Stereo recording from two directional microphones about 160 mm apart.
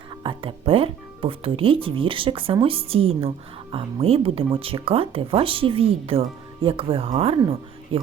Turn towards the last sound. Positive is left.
turn(degrees=-30)  # may be behind; listen again after turning